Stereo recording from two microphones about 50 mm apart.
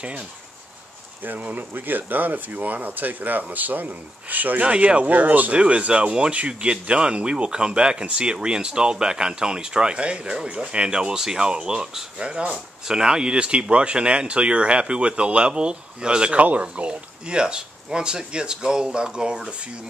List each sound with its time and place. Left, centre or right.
1.2 s speech: right
4.6 s speech: right